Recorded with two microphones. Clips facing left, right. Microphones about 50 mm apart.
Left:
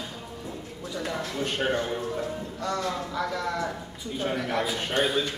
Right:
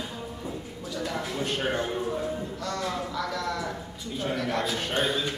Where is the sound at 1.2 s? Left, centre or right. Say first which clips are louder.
Even; centre.